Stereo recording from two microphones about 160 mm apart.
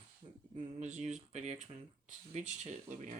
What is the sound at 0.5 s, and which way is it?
Speech, 45° right (ahead or behind).